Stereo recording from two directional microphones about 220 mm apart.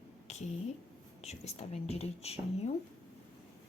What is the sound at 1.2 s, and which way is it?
Speech, 30° left (ahead or behind).